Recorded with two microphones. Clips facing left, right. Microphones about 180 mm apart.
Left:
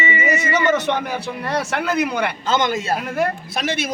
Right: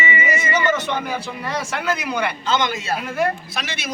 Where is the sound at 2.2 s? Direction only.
50° left (ahead or behind).